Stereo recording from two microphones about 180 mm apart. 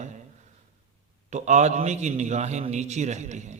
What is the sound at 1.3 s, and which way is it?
A man's voice, 40° right (ahead or behind).